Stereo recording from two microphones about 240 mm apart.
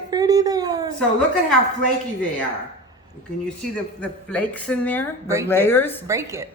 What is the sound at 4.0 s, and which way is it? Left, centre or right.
A woman's voice, centre.